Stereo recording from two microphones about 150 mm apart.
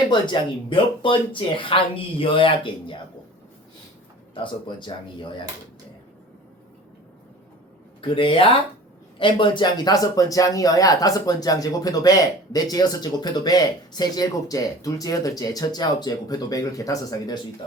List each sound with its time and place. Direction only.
0.1 s speech: 35° left (ahead or behind)
4.4 s speech: 30° left (ahead or behind)
8.0 s speech: 35° left (ahead or behind)